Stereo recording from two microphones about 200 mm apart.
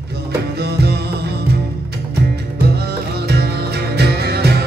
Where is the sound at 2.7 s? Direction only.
55° right (ahead or behind).